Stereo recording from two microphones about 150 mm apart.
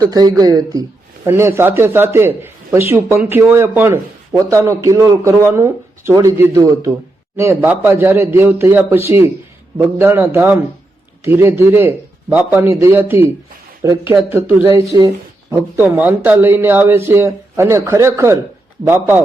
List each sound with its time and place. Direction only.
0.0 s speech: 25° right (ahead or behind)